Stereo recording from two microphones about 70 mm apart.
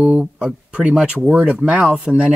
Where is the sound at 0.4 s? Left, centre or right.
Centre.